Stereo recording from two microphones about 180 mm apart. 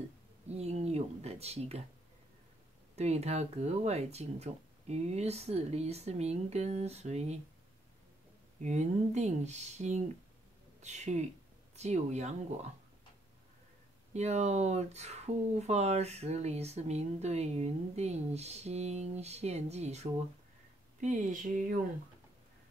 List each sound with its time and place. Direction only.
0.5 s speech: 35° right (ahead or behind)
3.0 s speech: 35° right (ahead or behind)
8.6 s speech: 40° right (ahead or behind)
14.1 s speech: 40° right (ahead or behind)